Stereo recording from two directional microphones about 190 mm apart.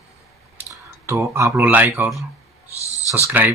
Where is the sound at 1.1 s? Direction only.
15° right (ahead or behind).